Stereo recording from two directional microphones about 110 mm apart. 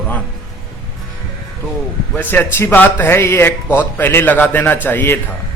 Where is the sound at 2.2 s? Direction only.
20° left (ahead or behind).